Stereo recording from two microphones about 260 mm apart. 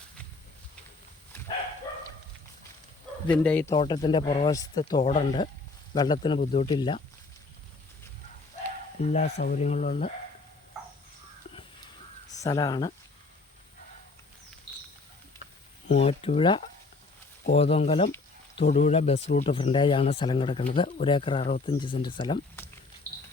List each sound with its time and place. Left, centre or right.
3.4 s speech: centre
3.8 s speech: centre
9.0 s speech: left
12.4 s speech: centre
15.9 s speech: left
23.1 s a sound: centre